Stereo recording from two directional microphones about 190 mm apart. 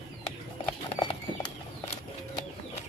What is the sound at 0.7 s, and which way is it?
Horse, 25° left (ahead or behind).